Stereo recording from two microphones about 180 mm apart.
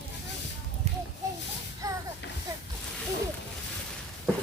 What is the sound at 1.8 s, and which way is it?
Music, 20° right (ahead or behind).